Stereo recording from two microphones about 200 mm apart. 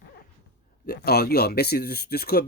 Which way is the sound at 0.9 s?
50° left (ahead or behind).